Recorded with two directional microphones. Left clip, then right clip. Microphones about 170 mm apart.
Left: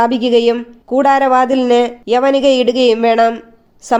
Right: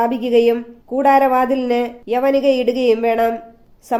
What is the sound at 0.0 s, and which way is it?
Speech, 40° left (ahead or behind).